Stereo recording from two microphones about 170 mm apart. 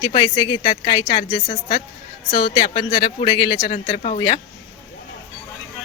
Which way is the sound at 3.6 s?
45° left (ahead or behind).